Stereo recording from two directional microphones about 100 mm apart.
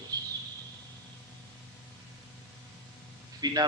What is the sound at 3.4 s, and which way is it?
Speech, 40° right (ahead or behind).